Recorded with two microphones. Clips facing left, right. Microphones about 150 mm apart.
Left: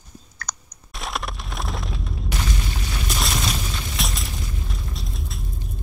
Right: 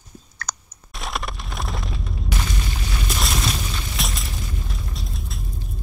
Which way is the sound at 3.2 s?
Centre (ahead or behind).